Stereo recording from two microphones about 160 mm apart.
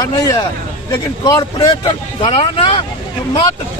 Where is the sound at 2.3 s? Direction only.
35° left (ahead or behind).